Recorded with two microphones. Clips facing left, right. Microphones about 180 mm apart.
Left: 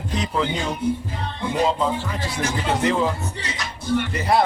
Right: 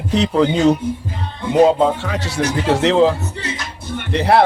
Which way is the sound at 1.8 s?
75° right (ahead or behind).